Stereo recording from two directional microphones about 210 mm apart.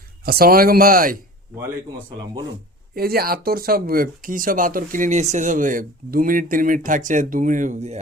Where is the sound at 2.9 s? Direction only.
45° right (ahead or behind).